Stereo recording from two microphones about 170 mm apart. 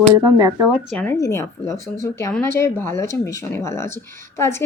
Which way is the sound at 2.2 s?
5° left (ahead or behind).